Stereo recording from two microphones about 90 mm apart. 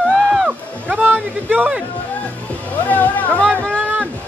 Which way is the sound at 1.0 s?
20° right (ahead or behind).